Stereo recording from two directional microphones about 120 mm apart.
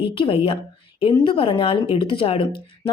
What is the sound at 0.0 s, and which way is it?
Speech, 45° left (ahead or behind).